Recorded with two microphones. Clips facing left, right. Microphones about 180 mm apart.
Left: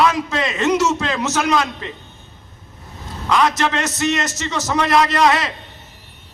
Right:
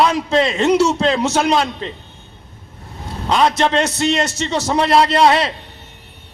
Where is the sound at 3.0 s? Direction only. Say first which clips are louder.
Right 2 dB; 30° right (ahead or behind).